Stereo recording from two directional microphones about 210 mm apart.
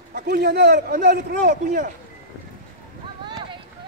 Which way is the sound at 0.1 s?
50° right (ahead or behind).